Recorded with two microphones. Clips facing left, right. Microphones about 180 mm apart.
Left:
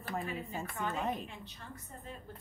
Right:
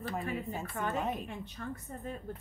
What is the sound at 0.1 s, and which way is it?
A woman's voice, centre (ahead or behind).